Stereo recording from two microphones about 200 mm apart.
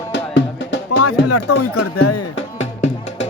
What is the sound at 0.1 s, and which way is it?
Music, 65° left (ahead or behind).